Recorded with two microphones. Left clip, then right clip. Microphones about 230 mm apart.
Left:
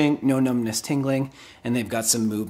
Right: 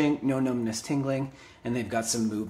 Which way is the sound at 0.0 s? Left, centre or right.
Left.